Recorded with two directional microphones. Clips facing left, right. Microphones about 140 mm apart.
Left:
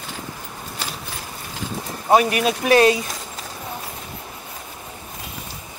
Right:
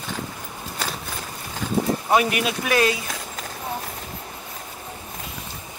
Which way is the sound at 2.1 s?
40° left (ahead or behind).